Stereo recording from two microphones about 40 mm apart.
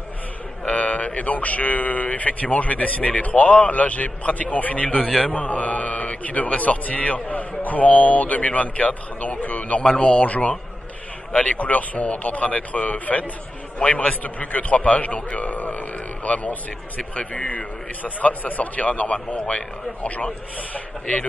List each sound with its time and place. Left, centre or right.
0.7 s a man's voice: left